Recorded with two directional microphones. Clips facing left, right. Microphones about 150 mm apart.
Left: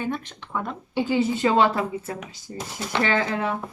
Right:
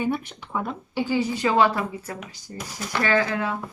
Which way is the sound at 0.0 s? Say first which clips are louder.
Right 3 dB; 10° right (ahead or behind).